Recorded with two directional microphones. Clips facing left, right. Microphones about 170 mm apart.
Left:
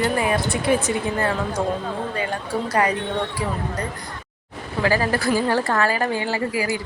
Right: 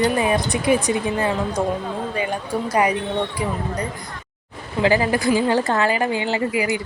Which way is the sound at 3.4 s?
15° right (ahead or behind).